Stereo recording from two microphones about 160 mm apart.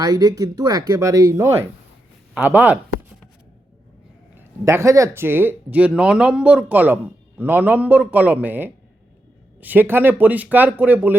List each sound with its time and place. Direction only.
0.0 s speech: 25° right (ahead or behind)
4.4 s speech: 15° right (ahead or behind)